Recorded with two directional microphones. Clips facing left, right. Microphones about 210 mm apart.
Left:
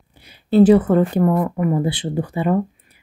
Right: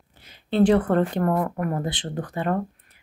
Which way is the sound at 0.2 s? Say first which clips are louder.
Left 7 dB; 10° left (ahead or behind).